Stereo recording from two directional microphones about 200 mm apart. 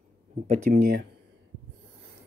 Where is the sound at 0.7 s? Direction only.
60° right (ahead or behind).